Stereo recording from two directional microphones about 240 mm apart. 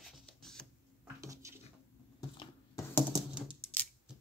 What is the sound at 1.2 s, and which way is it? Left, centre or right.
Dishes, centre.